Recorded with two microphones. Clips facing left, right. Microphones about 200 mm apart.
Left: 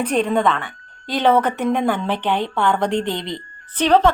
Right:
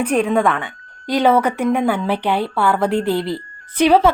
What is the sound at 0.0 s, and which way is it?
A woman's voice, 10° right (ahead or behind).